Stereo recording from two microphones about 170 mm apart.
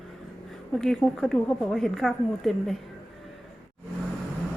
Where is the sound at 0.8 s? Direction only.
Centre (ahead or behind).